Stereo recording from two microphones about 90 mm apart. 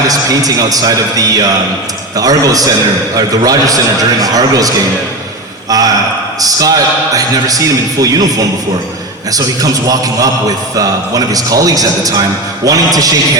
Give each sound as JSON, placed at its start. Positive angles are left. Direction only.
{"t": 0.1, "sound": "a man's voice", "side_deg": -40}